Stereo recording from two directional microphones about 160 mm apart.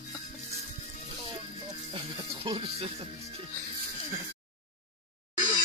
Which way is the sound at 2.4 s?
35° right (ahead or behind).